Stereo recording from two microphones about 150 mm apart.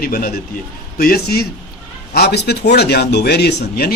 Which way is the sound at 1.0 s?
85° left.